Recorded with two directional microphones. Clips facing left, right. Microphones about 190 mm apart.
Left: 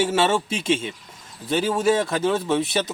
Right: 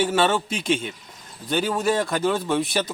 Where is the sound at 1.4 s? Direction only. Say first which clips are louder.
Left 2 dB; 5° left (ahead or behind).